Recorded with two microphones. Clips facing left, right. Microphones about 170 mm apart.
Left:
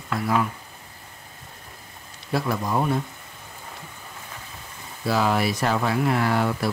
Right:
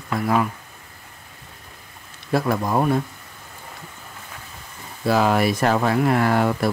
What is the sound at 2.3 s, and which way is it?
Speech, 55° right (ahead or behind).